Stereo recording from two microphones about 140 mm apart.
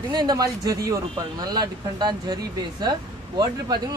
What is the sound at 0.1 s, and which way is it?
Speech, 30° right (ahead or behind).